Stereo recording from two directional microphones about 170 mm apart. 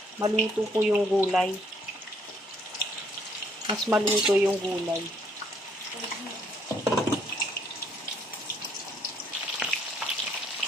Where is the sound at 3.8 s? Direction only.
5° right (ahead or behind).